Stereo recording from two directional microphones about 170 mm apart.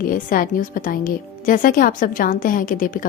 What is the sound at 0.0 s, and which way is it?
A woman's voice, 55° left (ahead or behind).